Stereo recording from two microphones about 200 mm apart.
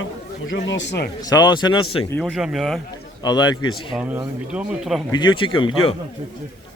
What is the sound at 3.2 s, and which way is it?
Speech, 20° left (ahead or behind).